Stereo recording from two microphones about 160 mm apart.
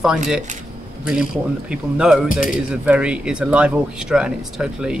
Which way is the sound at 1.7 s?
5° right (ahead or behind).